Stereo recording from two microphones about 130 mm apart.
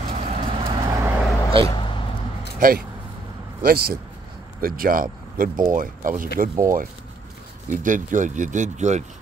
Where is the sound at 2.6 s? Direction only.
90° right.